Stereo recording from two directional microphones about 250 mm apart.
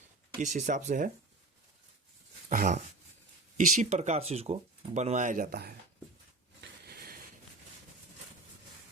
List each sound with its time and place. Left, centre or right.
0.3 s speech: right
2.5 s dog: right
3.8 s speech: right
6.6 s a sound: right